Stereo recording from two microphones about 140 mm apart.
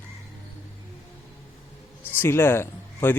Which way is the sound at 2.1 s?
15° left (ahead or behind).